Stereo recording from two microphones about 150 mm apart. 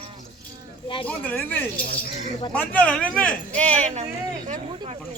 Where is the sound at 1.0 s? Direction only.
10° left (ahead or behind).